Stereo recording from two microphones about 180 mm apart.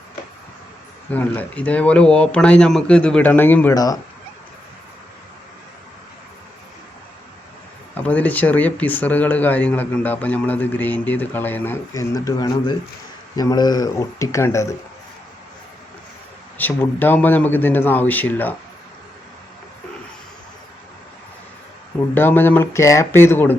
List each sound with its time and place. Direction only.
1.1 s speech: 10° left (ahead or behind)
7.9 s speech: 10° left (ahead or behind)
16.6 s speech: 10° left (ahead or behind)
22.1 s speech: 10° left (ahead or behind)